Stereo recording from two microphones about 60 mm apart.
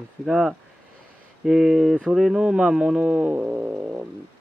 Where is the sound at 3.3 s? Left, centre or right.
Right.